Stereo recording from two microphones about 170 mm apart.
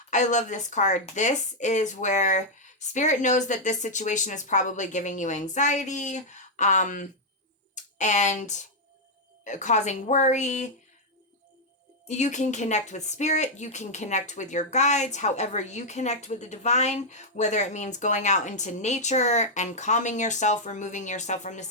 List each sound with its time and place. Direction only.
0.1 s a woman's voice: 45° left (ahead or behind)
12.0 s a woman's voice: 45° left (ahead or behind)